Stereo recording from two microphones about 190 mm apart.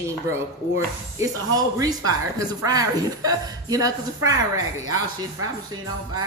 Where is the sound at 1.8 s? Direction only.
20° right (ahead or behind).